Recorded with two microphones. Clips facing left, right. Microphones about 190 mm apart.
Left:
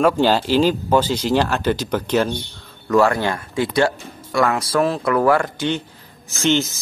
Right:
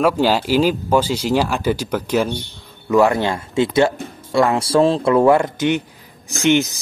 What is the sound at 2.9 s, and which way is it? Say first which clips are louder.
Speech: right 2 dB; 20° right (ahead or behind).